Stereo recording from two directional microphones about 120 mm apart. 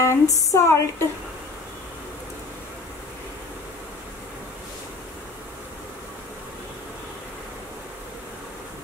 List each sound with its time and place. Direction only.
0.0 s speech: 25° left (ahead or behind)